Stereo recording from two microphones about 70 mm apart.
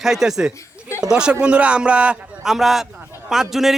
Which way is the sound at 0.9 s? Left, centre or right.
Left.